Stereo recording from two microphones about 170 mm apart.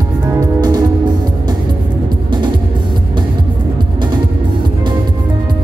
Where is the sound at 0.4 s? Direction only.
20° right (ahead or behind).